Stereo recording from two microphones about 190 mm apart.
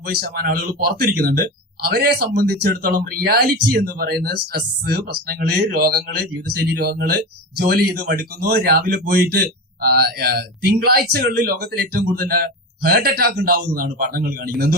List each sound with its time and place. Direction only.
0.1 s speech: 50° right (ahead or behind)